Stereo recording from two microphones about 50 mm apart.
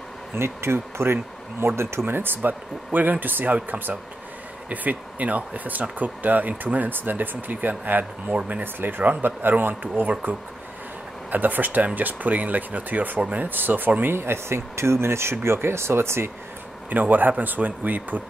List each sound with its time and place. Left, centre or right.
0.4 s speech: right
8.7 s speech: right
11.2 s speech: right
13.5 s speech: right
14.1 s speech: right
16.9 s speech: right